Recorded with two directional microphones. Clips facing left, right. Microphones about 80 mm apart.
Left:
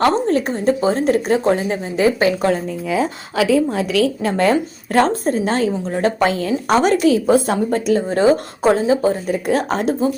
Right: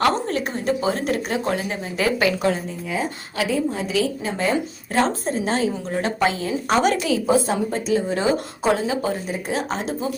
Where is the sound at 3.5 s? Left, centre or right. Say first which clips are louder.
Left 5 dB; left.